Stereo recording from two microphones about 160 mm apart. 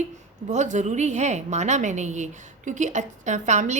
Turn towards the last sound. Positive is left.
turn(degrees=-50)  # may be behind; listen again after turning